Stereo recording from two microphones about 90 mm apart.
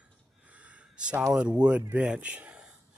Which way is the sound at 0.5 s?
15° right (ahead or behind).